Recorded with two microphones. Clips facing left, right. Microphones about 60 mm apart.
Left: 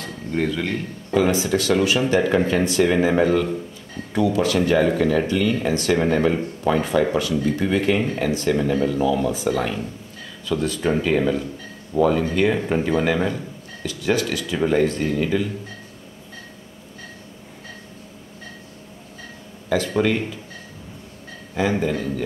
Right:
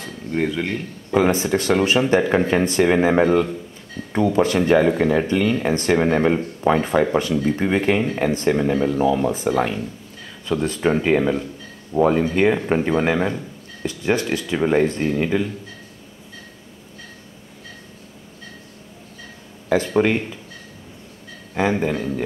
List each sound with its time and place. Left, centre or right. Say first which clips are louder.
0.0 s a sound: right 1 dB; centre
1.5 s speech: right 1 dB; right
8.5 s speech: right 1 dB; right
9.5 s speech: right 2 dB; centre
19.7 s speech: right 2 dB; right
21.5 s speech: right 1 dB; right